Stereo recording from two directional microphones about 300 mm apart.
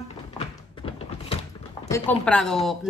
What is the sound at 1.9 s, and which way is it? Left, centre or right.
Speech, centre.